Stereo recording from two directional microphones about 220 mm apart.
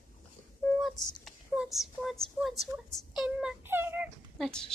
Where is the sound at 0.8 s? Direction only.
Centre (ahead or behind).